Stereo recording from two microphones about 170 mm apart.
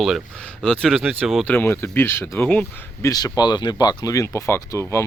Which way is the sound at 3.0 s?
20° left (ahead or behind).